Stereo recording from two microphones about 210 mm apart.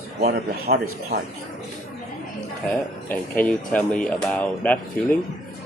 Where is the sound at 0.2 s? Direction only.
45° right (ahead or behind).